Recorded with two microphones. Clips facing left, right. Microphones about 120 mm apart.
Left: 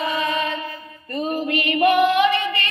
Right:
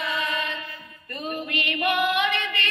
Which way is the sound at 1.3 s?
35° left (ahead or behind).